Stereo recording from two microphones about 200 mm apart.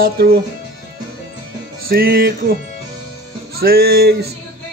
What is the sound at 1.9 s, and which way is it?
Music, 50° right (ahead or behind).